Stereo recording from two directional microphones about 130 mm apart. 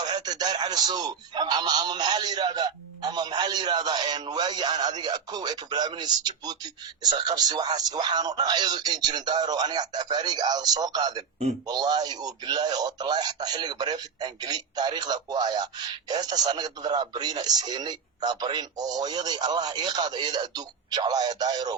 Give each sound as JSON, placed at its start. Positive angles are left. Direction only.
{"t": 0.0, "sound": "speech", "side_deg": -30}